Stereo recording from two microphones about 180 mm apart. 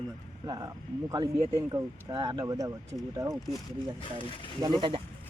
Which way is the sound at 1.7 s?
20° right (ahead or behind).